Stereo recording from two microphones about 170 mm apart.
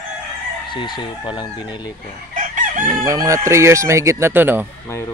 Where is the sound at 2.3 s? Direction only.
50° right (ahead or behind).